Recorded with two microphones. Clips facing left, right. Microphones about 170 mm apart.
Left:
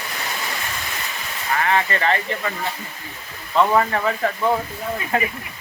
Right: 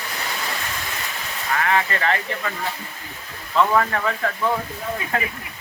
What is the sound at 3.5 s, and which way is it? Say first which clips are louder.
Speech: left 1 dB; 20° left (ahead or behind).